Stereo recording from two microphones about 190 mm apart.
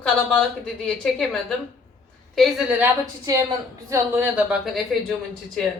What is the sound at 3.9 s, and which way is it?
Speech, 10° right (ahead or behind).